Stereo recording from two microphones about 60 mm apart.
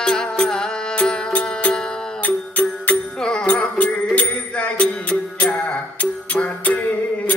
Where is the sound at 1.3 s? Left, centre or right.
Left.